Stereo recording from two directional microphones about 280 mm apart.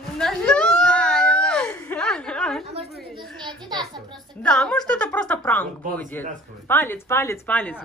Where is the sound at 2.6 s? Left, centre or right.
Right.